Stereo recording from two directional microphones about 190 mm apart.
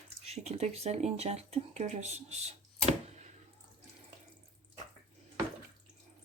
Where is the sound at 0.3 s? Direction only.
35° right (ahead or behind).